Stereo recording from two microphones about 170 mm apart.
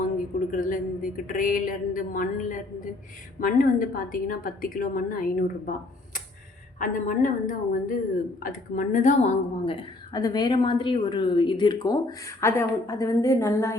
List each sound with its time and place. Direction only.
0.0 s a woman's voice: 50° left (ahead or behind)
6.7 s a woman's voice: 50° left (ahead or behind)
10.1 s speech: 20° left (ahead or behind)